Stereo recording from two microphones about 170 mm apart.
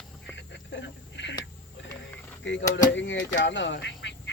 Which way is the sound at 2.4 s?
90° left.